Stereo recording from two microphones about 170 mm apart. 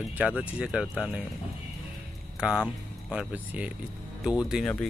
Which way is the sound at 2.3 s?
5° right (ahead or behind).